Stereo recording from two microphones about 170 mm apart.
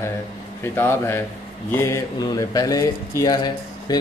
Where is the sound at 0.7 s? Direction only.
15° left (ahead or behind).